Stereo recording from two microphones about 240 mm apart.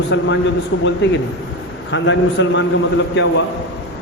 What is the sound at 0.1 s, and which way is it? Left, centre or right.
A man's voice, left.